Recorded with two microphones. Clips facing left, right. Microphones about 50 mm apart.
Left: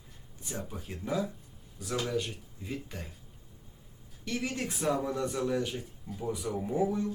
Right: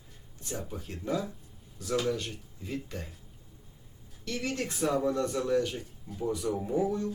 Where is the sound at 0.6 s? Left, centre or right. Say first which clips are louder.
Right 3 dB; centre.